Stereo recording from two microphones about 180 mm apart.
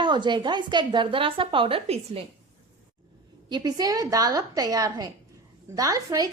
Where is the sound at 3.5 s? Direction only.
25° right (ahead or behind).